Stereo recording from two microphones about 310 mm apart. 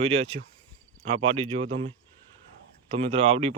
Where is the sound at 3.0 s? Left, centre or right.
Centre.